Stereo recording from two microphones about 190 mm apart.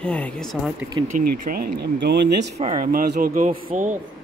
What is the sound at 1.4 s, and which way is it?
Speech, 50° right (ahead or behind).